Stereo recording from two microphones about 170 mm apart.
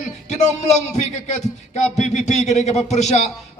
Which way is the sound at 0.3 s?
45° left (ahead or behind).